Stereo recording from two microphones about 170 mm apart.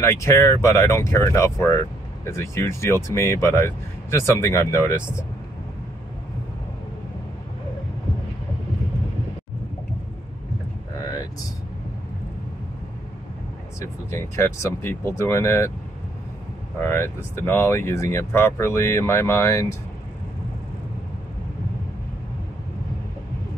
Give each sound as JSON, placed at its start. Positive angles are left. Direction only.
{"t": 0.0, "sound": "speech", "side_deg": 15}
{"t": 13.7, "sound": "speech", "side_deg": 15}
{"t": 16.8, "sound": "speech", "side_deg": 15}